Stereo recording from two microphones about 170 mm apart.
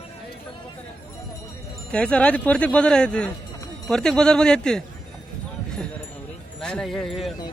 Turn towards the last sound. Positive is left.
turn(degrees=0)  # may be behind; listen again after turning